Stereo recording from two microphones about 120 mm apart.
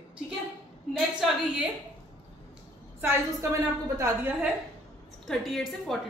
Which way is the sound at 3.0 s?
20° right (ahead or behind).